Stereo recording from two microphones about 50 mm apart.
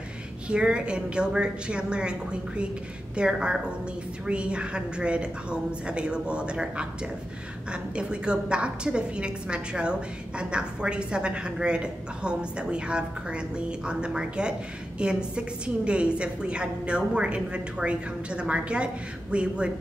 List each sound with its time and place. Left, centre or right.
0.5 s a woman's voice: right